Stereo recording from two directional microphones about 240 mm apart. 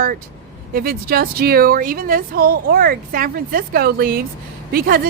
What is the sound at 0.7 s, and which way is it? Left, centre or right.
Speech, right.